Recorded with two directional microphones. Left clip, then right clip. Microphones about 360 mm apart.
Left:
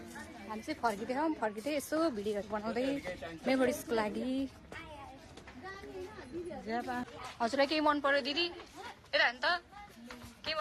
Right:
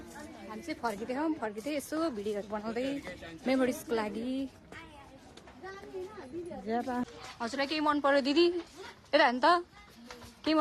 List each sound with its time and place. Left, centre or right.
0.5 s a woman's voice: centre
6.7 s speech: centre
7.3 s a woman's voice: centre